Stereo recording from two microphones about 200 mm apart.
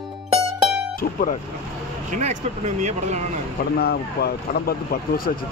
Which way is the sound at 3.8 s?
50° left (ahead or behind).